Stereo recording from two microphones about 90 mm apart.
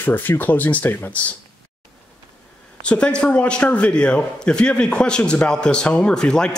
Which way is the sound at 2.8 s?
10° left (ahead or behind).